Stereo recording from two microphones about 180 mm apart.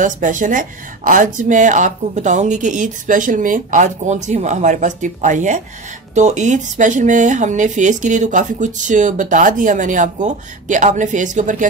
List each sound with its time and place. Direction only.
0.0 s speech: 45° right (ahead or behind)